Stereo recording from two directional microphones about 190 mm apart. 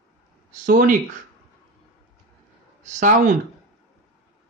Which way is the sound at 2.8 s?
40° right (ahead or behind).